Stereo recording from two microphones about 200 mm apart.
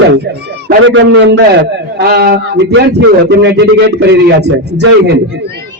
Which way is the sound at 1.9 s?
50° right (ahead or behind).